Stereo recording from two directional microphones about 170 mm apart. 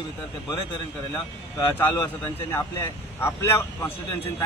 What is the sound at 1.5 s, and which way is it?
Speech, 15° left (ahead or behind).